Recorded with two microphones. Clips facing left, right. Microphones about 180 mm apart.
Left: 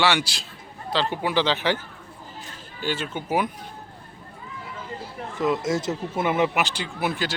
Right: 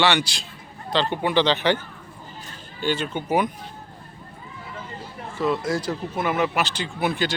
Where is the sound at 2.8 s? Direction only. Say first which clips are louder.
Right 3 dB; 5° left (ahead or behind).